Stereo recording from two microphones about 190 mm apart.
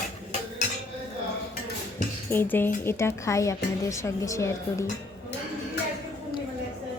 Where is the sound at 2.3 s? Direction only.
10° left (ahead or behind).